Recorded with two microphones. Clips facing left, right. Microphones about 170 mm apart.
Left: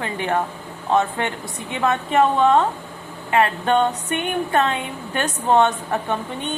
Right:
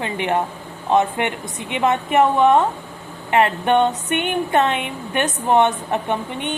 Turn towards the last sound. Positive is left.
turn(degrees=-20)  # may be behind; listen again after turning